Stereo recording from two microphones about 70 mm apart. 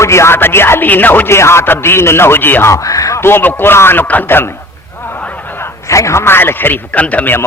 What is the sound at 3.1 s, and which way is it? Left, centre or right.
A man's voice, left.